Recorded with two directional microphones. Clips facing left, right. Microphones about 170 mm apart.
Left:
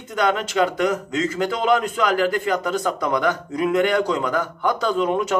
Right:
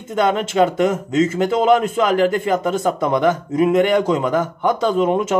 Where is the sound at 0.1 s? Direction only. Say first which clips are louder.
Right 3 dB; 25° right (ahead or behind).